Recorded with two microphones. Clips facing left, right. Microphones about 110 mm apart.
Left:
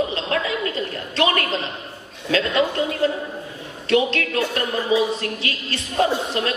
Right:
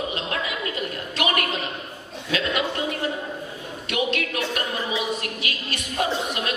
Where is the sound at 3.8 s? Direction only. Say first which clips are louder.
Left 6 dB; 30° left (ahead or behind).